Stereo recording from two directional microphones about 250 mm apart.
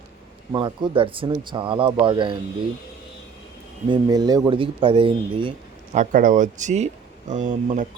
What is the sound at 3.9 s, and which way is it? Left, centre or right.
Speech, centre.